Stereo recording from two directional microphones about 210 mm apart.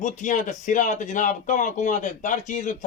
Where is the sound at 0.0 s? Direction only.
35° left (ahead or behind).